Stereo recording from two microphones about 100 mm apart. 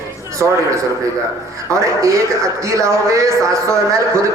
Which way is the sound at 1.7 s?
30° right (ahead or behind).